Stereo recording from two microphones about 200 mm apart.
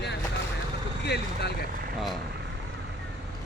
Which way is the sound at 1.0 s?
55° left (ahead or behind).